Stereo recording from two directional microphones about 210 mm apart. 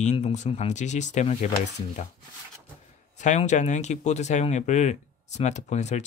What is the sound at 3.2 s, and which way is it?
Speech, 35° left (ahead or behind).